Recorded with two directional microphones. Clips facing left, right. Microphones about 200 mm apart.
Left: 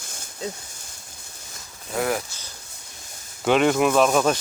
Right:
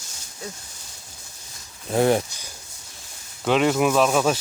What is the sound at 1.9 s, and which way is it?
Speech, 30° right (ahead or behind).